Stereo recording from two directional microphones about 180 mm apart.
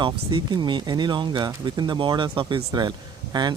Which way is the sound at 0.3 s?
25° right (ahead or behind).